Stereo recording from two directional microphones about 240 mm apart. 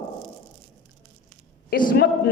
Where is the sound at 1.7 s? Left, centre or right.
Left.